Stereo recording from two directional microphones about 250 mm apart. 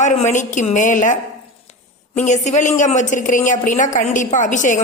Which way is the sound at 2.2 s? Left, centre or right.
Left.